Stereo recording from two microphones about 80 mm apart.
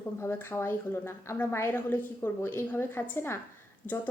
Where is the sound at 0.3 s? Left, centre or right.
Left.